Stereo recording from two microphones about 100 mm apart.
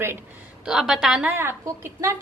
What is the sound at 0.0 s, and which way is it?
Speech, 25° right (ahead or behind).